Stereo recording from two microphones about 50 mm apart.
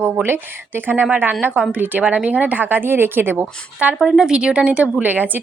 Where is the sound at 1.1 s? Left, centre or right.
Right.